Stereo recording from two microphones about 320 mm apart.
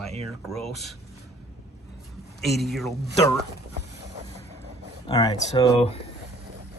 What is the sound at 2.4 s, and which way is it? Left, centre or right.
Speech, centre.